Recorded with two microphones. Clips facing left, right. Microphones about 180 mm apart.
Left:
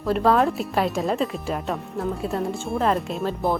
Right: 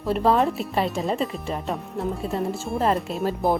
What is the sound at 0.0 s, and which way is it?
Speech, centre (ahead or behind).